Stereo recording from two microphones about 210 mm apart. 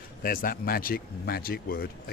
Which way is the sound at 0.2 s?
45° left (ahead or behind).